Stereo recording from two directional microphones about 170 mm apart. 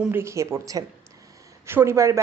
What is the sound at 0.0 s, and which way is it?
A woman's voice, 15° right (ahead or behind).